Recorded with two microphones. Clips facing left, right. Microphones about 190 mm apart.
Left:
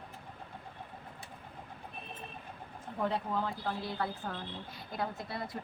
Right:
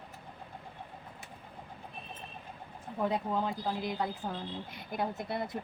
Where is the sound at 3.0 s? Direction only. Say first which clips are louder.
Right 2 dB; 15° right (ahead or behind).